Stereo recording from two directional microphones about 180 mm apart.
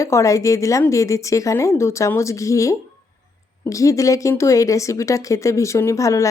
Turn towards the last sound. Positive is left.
turn(degrees=15)  # may be behind; listen again after turning